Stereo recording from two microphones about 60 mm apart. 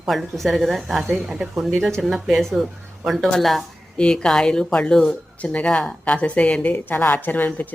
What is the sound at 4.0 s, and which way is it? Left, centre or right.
Speech, centre.